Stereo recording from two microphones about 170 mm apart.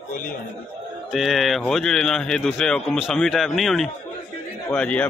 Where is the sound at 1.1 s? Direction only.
Centre (ahead or behind).